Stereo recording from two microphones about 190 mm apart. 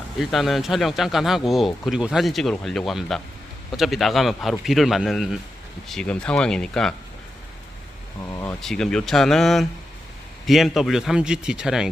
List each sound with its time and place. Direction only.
0.2 s speech: centre (ahead or behind)
8.3 s speech: 15° left (ahead or behind)
8.6 s speech: 5° left (ahead or behind)